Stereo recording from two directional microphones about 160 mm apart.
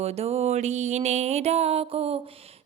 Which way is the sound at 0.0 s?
40° right (ahead or behind).